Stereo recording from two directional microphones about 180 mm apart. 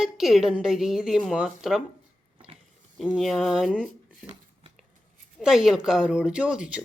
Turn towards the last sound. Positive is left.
turn(degrees=-5)  # may be behind; listen again after turning